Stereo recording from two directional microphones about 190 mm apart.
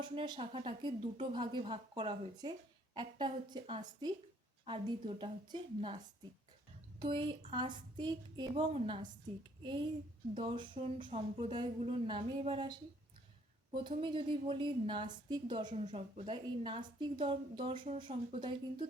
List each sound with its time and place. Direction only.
0.0 s a woman's voice: 25° right (ahead or behind)
7.0 s a woman's voice: 25° right (ahead or behind)